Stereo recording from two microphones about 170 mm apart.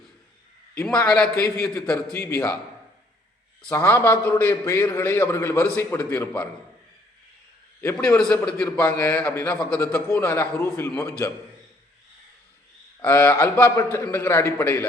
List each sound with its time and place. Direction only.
0.7 s a man's voice: 5° left (ahead or behind)
3.7 s a man's voice: 15° left (ahead or behind)
7.8 s a man's voice: 10° left (ahead or behind)
13.0 s a man's voice: 10° left (ahead or behind)